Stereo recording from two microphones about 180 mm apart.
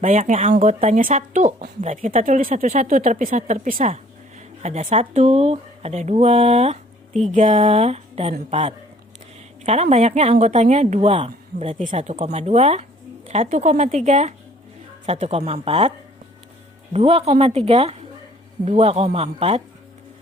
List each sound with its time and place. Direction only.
0.0 s a woman's voice: 45° right (ahead or behind)
16.9 s a woman's voice: 35° right (ahead or behind)